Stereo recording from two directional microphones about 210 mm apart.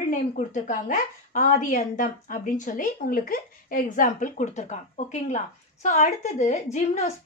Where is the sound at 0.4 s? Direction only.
35° left (ahead or behind).